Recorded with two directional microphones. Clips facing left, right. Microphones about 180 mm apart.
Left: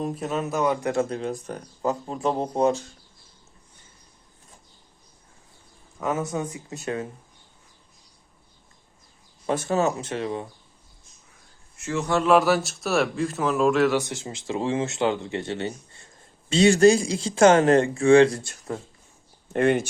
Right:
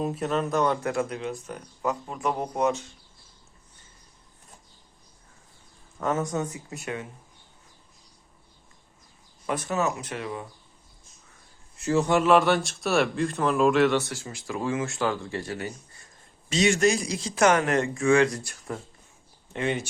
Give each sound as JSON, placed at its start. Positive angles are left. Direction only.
{"t": 0.0, "sound": "speech", "side_deg": 0}
{"t": 0.9, "sound": "speech", "side_deg": 25}
{"t": 6.0, "sound": "speech", "side_deg": 10}
{"t": 6.5, "sound": "speech", "side_deg": 25}
{"t": 9.5, "sound": "speech", "side_deg": 30}
{"t": 11.8, "sound": "a man's voice", "side_deg": -35}
{"t": 12.2, "sound": "speech", "side_deg": 0}
{"t": 14.0, "sound": "speech", "side_deg": 20}
{"t": 19.5, "sound": "speech", "side_deg": 50}